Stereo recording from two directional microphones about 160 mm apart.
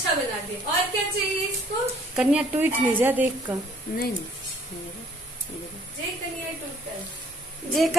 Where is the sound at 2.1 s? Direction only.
10° right (ahead or behind).